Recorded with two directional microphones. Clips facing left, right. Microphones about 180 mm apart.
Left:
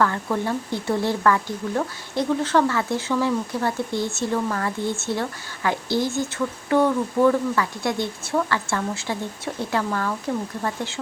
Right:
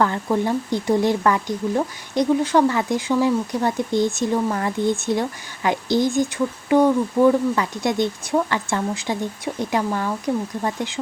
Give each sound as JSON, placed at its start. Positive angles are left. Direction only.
{"t": 0.0, "sound": "speech", "side_deg": -20}